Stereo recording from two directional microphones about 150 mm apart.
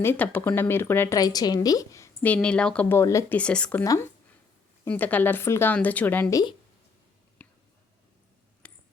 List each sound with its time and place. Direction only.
0.0 s speech: 15° left (ahead or behind)
2.2 s speech: 10° left (ahead or behind)
3.0 s speech: 20° left (ahead or behind)
3.3 s speech: 5° left (ahead or behind)
3.8 s speech: 20° left (ahead or behind)
7.4 s a sound: 10° left (ahead or behind)